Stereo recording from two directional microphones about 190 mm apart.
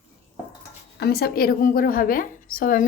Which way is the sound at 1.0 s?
55° left (ahead or behind).